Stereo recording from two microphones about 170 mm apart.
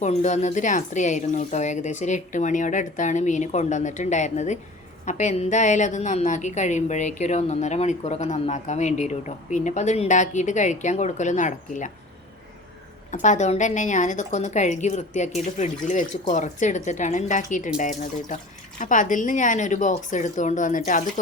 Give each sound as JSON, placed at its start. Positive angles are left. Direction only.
{"t": 0.0, "sound": "a woman's voice", "side_deg": 40}
{"t": 13.1, "sound": "a woman's voice", "side_deg": 45}